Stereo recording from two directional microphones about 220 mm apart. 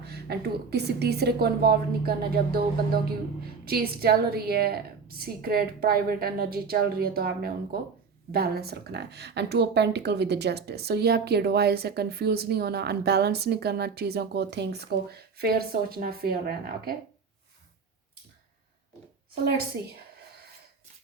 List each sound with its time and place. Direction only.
0.0 s speech: 45° right (ahead or behind)
19.8 s speech: 10° right (ahead or behind)